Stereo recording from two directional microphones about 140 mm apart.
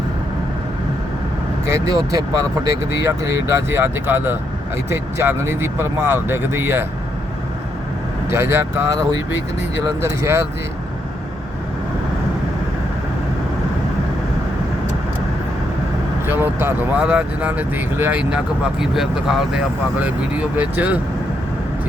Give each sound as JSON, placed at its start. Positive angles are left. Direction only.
{"t": 1.6, "sound": "speech", "side_deg": -20}
{"t": 8.3, "sound": "speech", "side_deg": -20}
{"t": 10.0, "sound": "speech", "side_deg": -20}
{"t": 16.2, "sound": "speech", "side_deg": -15}